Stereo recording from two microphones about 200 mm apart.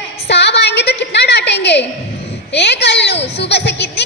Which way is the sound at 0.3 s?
60° left (ahead or behind).